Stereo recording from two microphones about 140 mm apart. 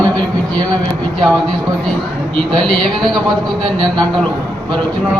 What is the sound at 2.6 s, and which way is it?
Speech, 5° left (ahead or behind).